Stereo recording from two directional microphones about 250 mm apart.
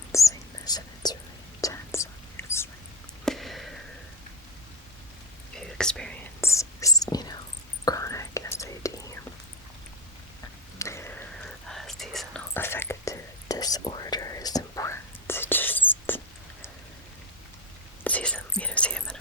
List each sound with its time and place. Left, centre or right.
0.1 s whispering: centre
3.2 s a sound: centre
5.5 s whispering: centre
10.8 s whispering: centre
18.0 s whispering: centre